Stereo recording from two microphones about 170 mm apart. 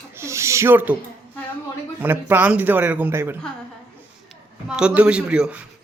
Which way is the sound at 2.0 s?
10° right (ahead or behind).